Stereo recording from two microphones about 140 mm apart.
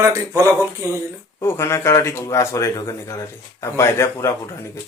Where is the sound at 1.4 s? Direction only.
20° left (ahead or behind).